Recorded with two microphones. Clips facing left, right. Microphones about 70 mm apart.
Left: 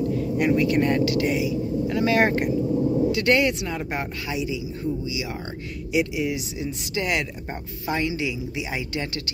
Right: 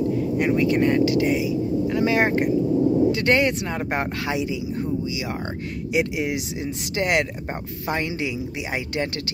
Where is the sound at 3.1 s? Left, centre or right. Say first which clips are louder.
Right 1 dB; right.